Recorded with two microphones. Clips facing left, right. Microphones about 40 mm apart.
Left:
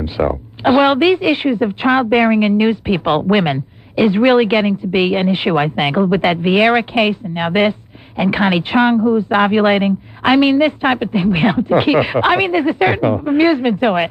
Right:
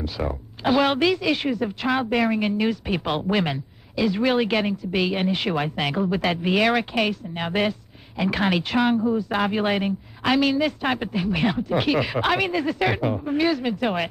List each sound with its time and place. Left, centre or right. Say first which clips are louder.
0.0 s speech: left 10 dB; left